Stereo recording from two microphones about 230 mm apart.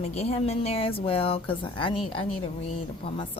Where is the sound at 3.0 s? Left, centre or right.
Left.